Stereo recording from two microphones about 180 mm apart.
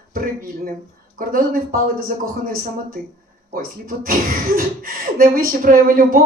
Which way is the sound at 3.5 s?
50° right (ahead or behind).